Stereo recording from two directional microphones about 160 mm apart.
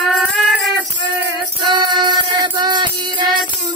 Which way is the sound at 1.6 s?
30° right (ahead or behind).